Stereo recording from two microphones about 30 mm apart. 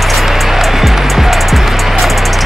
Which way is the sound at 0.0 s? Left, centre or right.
Centre.